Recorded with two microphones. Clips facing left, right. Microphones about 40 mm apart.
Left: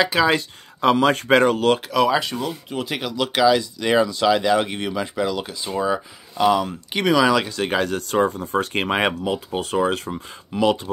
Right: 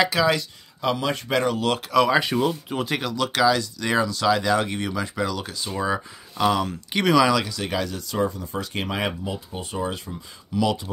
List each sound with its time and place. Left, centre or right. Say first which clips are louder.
0.1 s speech: left 3 dB; left
0.7 s speech: left 7 dB; left
1.9 s speech: even; centre
7.3 s speech: left 4 dB; left
9.2 s speech: left 7 dB; left
10.5 s speech: left 4 dB; left